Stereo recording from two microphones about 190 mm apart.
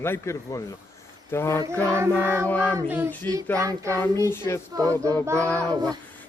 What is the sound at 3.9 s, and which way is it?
Speech, 10° left (ahead or behind).